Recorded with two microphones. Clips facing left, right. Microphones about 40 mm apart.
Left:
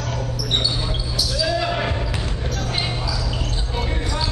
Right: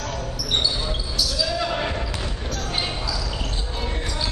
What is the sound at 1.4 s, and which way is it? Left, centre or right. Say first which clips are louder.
Basketball bounce: left 4 dB; centre.